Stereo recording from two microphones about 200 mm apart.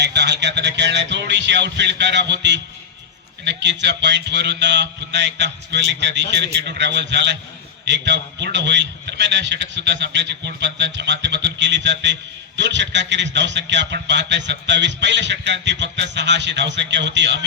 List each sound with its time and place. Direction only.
0.0 s a man's voice: 60° right (ahead or behind)